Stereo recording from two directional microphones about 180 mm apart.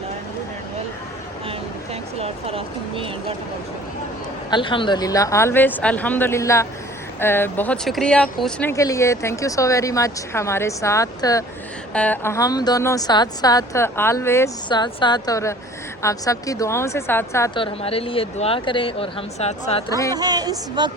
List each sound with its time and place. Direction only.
1.5 s speech: 35° right (ahead or behind)
4.5 s speech: 25° left (ahead or behind); by 8.7 s 5° left (ahead or behind)
8.7 s speech: 20° left (ahead or behind)
11.9 s a woman's voice: 10° left (ahead or behind)
17.5 s speech: 30° left (ahead or behind)
19.9 s speech: 20° left (ahead or behind)
20.1 s speech: 20° right (ahead or behind)